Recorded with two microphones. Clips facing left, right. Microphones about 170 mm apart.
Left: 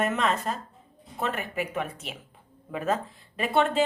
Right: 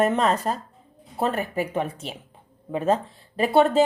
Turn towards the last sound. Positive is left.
turn(degrees=-35)  # may be behind; listen again after turning